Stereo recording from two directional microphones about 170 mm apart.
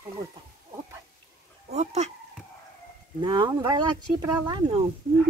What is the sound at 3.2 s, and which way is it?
Speech, 30° right (ahead or behind).